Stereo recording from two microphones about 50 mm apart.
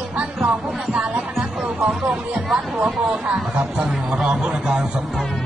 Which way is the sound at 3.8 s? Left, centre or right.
Centre.